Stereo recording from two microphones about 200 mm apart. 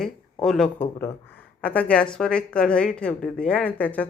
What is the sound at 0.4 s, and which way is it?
A woman's voice, centre (ahead or behind).